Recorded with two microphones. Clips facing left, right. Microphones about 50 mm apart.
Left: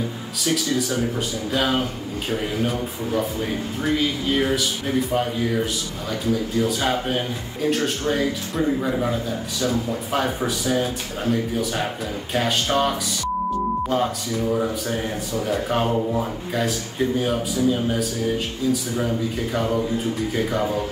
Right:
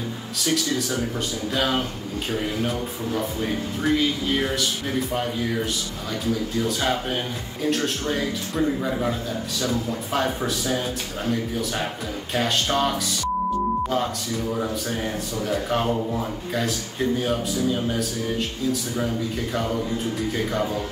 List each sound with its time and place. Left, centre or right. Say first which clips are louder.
0.4 s speech: left 2 dB; centre